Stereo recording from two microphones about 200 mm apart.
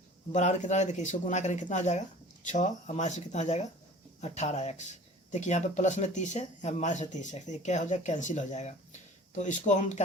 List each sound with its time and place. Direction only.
0.3 s speech: 35° left (ahead or behind)